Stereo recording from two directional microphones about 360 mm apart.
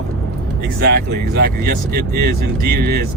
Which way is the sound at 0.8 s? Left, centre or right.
Right.